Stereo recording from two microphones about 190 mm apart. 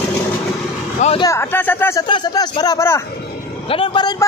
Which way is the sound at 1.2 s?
15° left (ahead or behind).